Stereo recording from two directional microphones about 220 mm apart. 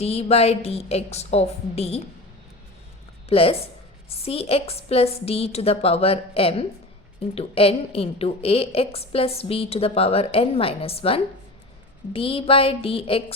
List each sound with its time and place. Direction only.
0.0 s a woman's voice: 30° left (ahead or behind)
3.2 s a woman's voice: 25° left (ahead or behind)